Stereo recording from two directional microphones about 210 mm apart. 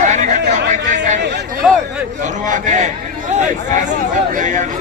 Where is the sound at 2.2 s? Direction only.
35° right (ahead or behind).